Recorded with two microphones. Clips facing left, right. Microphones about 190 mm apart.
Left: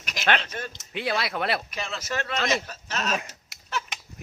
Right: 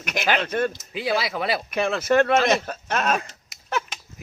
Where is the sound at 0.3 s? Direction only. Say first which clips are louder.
Right 9 dB; 60° right (ahead or behind).